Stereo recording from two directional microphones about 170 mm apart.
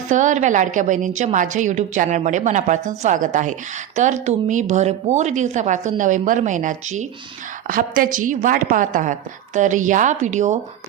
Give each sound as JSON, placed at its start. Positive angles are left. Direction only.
{"t": 0.1, "sound": "a woman's voice", "side_deg": -45}
{"t": 7.7, "sound": "a woman's voice", "side_deg": -55}